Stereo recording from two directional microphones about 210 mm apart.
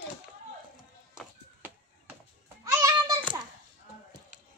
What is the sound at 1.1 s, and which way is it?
Run, 10° right (ahead or behind).